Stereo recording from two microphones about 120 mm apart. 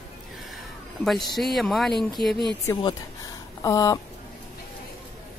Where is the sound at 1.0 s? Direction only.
Centre (ahead or behind).